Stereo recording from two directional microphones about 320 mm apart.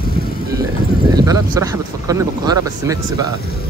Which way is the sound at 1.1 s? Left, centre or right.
Centre.